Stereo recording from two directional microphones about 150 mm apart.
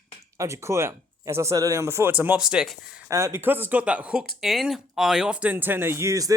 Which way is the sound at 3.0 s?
20° right (ahead or behind).